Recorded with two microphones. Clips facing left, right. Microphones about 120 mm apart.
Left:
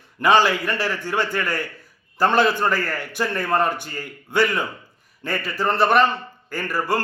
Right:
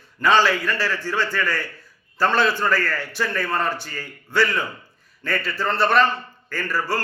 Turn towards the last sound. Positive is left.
turn(degrees=20)  # may be behind; listen again after turning